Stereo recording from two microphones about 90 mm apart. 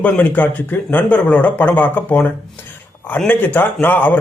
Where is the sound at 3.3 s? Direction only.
20° left (ahead or behind).